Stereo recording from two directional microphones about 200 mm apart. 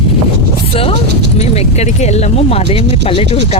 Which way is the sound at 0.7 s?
30° left (ahead or behind).